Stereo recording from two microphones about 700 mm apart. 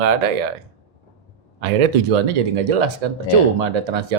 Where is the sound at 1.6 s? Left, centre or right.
Right.